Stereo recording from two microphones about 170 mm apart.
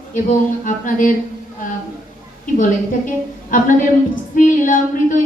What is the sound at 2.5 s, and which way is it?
A woman's voice, 50° left (ahead or behind).